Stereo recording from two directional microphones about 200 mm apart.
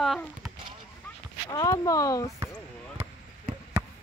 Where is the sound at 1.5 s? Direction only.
20° left (ahead or behind).